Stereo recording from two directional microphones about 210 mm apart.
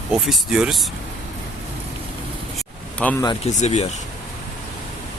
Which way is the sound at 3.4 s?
30° left (ahead or behind).